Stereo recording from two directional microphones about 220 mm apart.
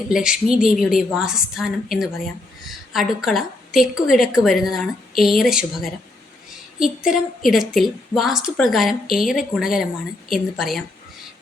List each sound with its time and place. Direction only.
0.1 s a woman's voice: 5° right (ahead or behind)